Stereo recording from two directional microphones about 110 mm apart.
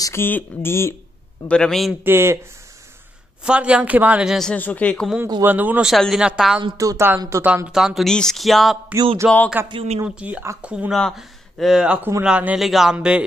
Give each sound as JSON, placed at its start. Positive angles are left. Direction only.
{"t": 0.0, "sound": "speech", "side_deg": 20}
{"t": 1.5, "sound": "speech", "side_deg": 5}
{"t": 2.0, "sound": "speech", "side_deg": -25}
{"t": 3.4, "sound": "a man's voice", "side_deg": -10}
{"t": 4.4, "sound": "speech", "side_deg": 10}
{"t": 5.4, "sound": "a man's voice", "side_deg": -15}
{"t": 5.9, "sound": "speech", "side_deg": 0}
{"t": 6.8, "sound": "speech", "side_deg": -30}
{"t": 7.4, "sound": "speech", "side_deg": -10}
{"t": 9.2, "sound": "a man's voice", "side_deg": -10}
{"t": 9.7, "sound": "a man's voice", "side_deg": -55}
{"t": 10.0, "sound": "a man's voice", "side_deg": -10}
{"t": 11.0, "sound": "a man's voice", "side_deg": 5}